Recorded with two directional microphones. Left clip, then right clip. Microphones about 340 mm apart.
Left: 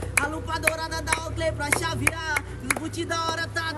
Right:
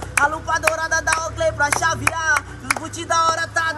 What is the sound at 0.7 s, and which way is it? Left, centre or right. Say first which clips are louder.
Music: right 8 dB; centre.